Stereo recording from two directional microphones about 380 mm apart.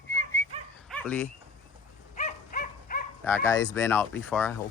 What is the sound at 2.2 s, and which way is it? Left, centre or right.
Dog, left.